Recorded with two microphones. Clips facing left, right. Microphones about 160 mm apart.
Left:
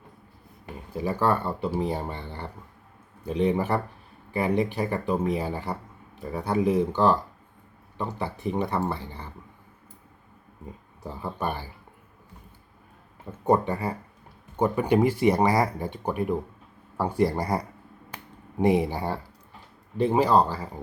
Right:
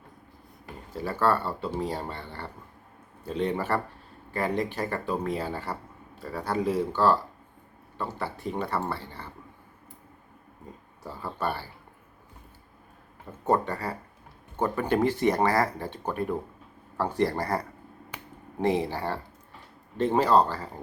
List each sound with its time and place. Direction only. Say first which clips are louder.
0.6 s speech: left 4 dB; 15° left (ahead or behind)
11.0 s speech: left 1 dB; 15° left (ahead or behind)
13.4 s speech: left 3 dB; 15° left (ahead or behind)